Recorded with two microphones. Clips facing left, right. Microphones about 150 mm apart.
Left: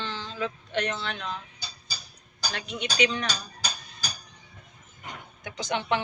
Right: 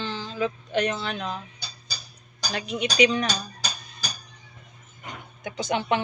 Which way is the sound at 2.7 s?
10° right (ahead or behind).